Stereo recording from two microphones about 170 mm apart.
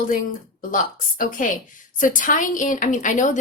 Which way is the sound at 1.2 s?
50° left (ahead or behind).